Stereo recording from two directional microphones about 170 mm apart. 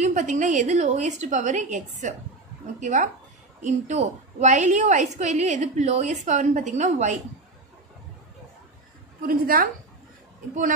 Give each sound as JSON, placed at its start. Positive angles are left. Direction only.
{"t": 0.0, "sound": "a woman's voice", "side_deg": -45}
{"t": 9.2, "sound": "a woman's voice", "side_deg": -55}